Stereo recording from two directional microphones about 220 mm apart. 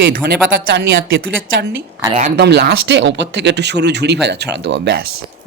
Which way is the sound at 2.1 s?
35° right (ahead or behind).